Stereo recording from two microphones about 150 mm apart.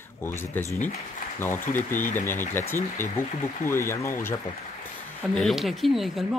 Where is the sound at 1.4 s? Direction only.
15° left (ahead or behind).